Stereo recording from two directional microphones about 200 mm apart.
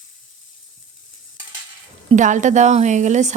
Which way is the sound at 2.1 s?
35° right (ahead or behind).